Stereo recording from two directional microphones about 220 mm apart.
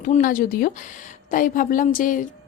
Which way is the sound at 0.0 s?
40° left (ahead or behind).